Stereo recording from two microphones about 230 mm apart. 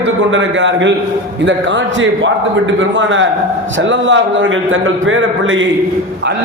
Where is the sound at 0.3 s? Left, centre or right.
Right.